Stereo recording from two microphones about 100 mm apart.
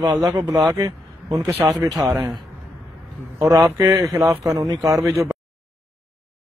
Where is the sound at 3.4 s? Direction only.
35° right (ahead or behind).